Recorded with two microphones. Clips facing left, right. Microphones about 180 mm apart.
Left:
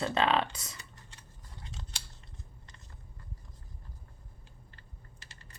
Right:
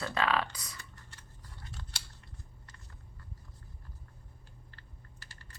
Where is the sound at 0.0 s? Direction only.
25° left (ahead or behind).